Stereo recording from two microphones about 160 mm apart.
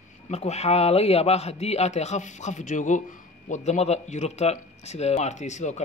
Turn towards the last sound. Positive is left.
turn(degrees=45)  # may be behind; listen again after turning